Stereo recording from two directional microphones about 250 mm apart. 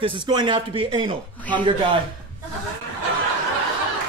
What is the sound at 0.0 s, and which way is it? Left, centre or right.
Speech, centre.